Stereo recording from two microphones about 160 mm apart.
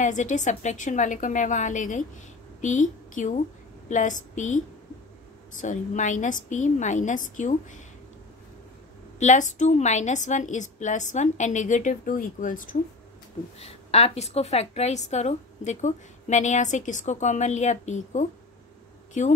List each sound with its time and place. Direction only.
0.0 s a woman's voice: 50° left (ahead or behind)
9.2 s a woman's voice: 50° left (ahead or behind)
13.6 s a woman's voice: 40° left (ahead or behind)